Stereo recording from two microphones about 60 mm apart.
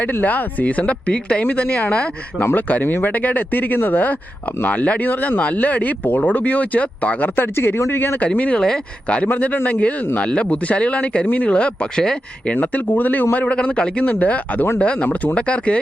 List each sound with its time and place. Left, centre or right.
0.0 s speech: left
2.4 s speech: left
7.3 s speech: left
8.2 s speech: left
12.5 s speech: left
14.0 s speech: left